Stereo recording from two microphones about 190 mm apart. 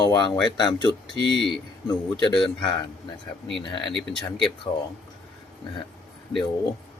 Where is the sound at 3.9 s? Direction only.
Centre (ahead or behind).